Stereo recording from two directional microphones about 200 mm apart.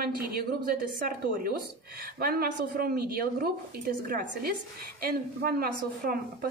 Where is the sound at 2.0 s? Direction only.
50° right (ahead or behind).